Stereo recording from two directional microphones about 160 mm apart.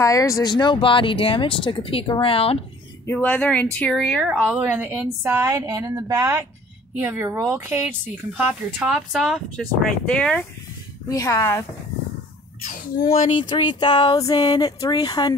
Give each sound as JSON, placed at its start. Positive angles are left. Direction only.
{"t": 0.0, "sound": "speech", "side_deg": 20}
{"t": 3.1, "sound": "speech", "side_deg": 10}
{"t": 5.7, "sound": "a woman's voice", "side_deg": -20}
{"t": 11.1, "sound": "speech", "side_deg": 20}
{"t": 12.6, "sound": "speech", "side_deg": 65}
{"t": 13.5, "sound": "speech", "side_deg": 30}